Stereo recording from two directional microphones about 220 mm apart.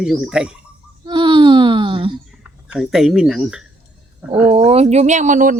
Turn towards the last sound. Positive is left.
turn(degrees=-35)  # may be behind; listen again after turning